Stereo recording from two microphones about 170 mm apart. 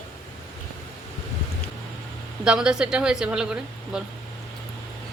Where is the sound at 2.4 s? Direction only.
5° right (ahead or behind).